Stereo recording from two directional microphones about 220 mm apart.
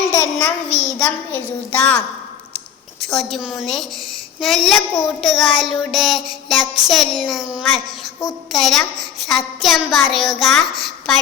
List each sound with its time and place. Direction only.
0.1 s a child's voice: 10° left (ahead or behind)
3.1 s a child's voice: centre (ahead or behind)